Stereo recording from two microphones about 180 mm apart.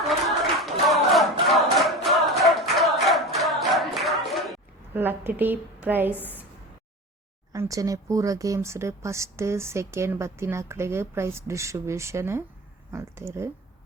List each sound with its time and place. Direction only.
0.0 s clapping: centre (ahead or behind)
4.9 s speech: 10° right (ahead or behind)
6.1 s a woman's voice: 10° left (ahead or behind)
7.5 s speech: 15° right (ahead or behind)